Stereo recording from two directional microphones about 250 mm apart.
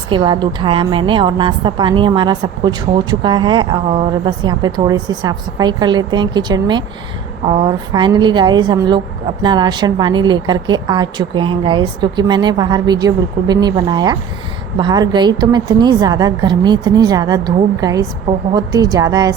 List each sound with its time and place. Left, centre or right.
0.1 s a woman's voice: centre